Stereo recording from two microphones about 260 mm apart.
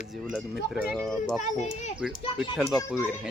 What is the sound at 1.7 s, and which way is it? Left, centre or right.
Speech, left.